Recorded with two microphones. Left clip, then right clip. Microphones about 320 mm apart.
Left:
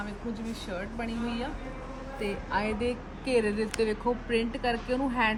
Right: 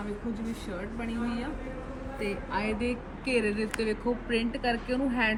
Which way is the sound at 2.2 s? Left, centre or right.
Left.